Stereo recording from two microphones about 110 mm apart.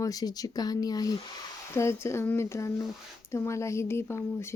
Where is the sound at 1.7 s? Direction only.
25° left (ahead or behind).